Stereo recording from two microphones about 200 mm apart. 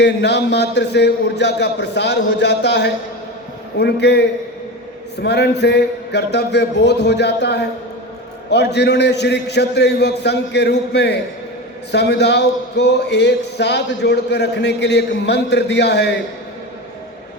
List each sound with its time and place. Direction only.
0.0 s speech: 60° left (ahead or behind)
5.2 s speech: 55° left (ahead or behind)